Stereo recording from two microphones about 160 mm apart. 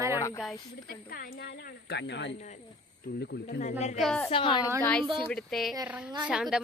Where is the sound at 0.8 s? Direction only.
70° left (ahead or behind); by 3.6 s 90° left.